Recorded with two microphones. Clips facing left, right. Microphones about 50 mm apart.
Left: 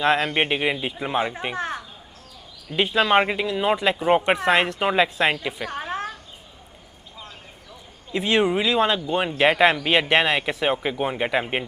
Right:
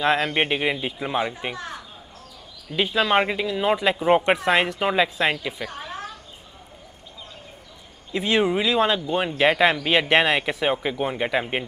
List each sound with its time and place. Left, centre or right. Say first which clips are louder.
0.0 s speech: left 1 dB; centre
1.5 s speech: left 5 dB; left
2.7 s speech: left 2 dB; centre
5.7 s a sound: left 5 dB; left
8.1 s speech: left 1 dB; centre